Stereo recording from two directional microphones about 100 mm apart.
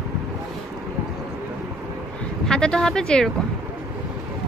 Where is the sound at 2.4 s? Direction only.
10° left (ahead or behind).